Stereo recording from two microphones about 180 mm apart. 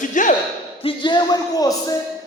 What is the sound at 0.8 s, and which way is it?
A man's voice, 25° left (ahead or behind).